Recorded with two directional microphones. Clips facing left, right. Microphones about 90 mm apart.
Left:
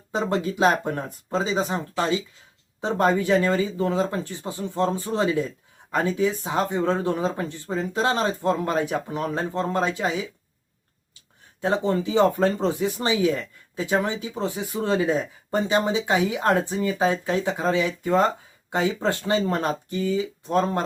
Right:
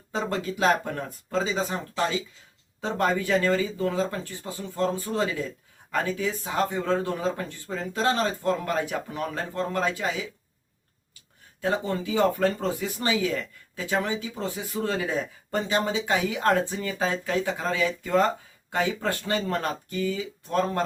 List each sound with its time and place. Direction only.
0.1 s speech: 20° left (ahead or behind)
11.6 s speech: 25° left (ahead or behind)